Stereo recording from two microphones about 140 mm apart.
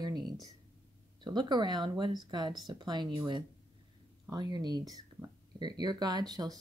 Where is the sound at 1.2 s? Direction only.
30° right (ahead or behind).